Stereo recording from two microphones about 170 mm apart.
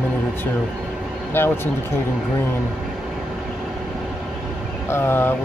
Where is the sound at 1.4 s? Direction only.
15° left (ahead or behind).